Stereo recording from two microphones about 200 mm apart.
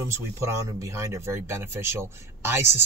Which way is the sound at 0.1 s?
15° right (ahead or behind).